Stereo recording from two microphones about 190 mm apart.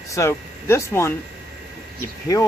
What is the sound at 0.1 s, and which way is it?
Speech, 15° left (ahead or behind).